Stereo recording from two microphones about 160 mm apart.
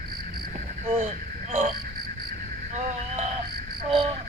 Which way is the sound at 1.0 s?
50° right (ahead or behind).